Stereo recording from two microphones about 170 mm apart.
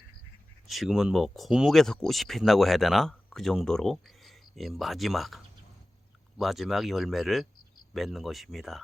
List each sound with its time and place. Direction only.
0.7 s speech: centre (ahead or behind)